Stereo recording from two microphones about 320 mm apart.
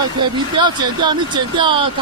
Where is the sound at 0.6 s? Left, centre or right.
Centre.